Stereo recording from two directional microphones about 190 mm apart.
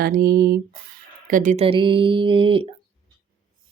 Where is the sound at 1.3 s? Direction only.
45° right (ahead or behind).